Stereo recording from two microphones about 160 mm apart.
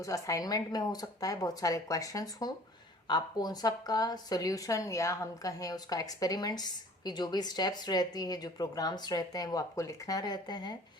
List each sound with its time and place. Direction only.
0.0 s speech: 20° left (ahead or behind)